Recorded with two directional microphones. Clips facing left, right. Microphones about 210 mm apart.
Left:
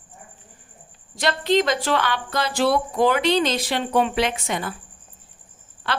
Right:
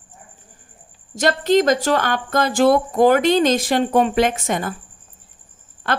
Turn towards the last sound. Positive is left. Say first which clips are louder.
# right 4 dB
turn(degrees=-50)  # may be behind; listen again after turning